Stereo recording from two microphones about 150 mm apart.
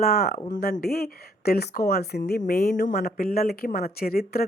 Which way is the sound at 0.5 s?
75° left (ahead or behind).